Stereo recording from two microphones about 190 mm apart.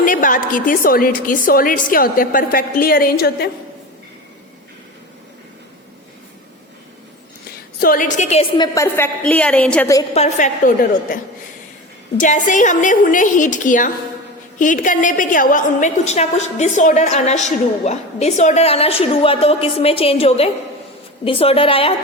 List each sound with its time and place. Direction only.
0.0 s a woman's voice: 45° left (ahead or behind)
7.8 s a woman's voice: 45° left (ahead or behind); by 9.0 s 15° left (ahead or behind)
9.2 s a woman's voice: 5° left (ahead or behind)
10.2 s a woman's voice: 40° left (ahead or behind)